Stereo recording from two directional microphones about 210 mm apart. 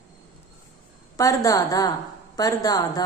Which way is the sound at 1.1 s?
15° left (ahead or behind).